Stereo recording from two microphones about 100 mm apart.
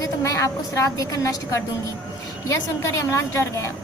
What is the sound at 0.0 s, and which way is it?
A woman's voice, 30° left (ahead or behind).